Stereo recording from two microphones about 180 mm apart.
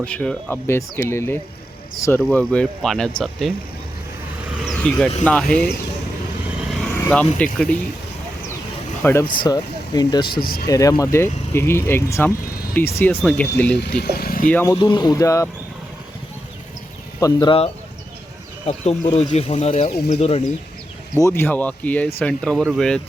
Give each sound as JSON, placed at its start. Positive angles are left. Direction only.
{"t": 0.0, "sound": "speech", "side_deg": 5}
{"t": 4.4, "sound": "vehicle", "side_deg": -5}
{"t": 5.2, "sound": "speech", "side_deg": 5}
{"t": 7.1, "sound": "speech", "side_deg": 5}
{"t": 9.0, "sound": "speech", "side_deg": 10}
{"t": 9.4, "sound": "speech", "side_deg": 25}
{"t": 10.3, "sound": "speech", "side_deg": 55}
{"t": 10.7, "sound": "speech", "side_deg": 20}
{"t": 13.7, "sound": "speech", "side_deg": 65}
{"t": 14.5, "sound": "speech", "side_deg": 15}
{"t": 14.8, "sound": "speech", "side_deg": 25}
{"t": 17.2, "sound": "speech", "side_deg": 20}
{"t": 18.9, "sound": "speech", "side_deg": 35}
{"t": 21.2, "sound": "speech", "side_deg": 15}